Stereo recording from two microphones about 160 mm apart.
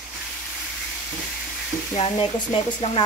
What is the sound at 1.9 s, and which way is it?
Speech, 35° left (ahead or behind).